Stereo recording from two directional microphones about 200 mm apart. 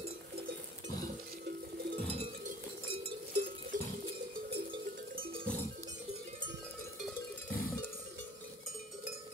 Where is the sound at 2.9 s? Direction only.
25° right (ahead or behind).